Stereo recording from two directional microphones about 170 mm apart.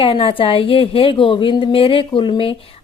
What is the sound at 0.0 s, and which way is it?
A woman's voice, 30° left (ahead or behind).